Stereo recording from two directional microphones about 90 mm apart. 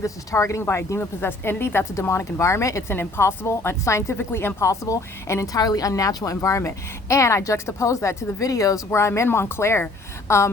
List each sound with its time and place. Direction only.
0.0 s a woman's voice: 35° left (ahead or behind)